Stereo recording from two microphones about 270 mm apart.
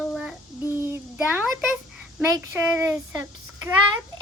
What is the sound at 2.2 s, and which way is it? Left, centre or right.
Speech, centre.